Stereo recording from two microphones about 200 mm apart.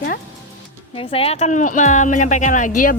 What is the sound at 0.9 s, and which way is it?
Speech, 30° left (ahead or behind).